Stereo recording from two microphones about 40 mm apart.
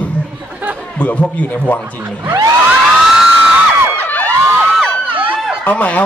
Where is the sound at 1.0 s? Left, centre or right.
Left.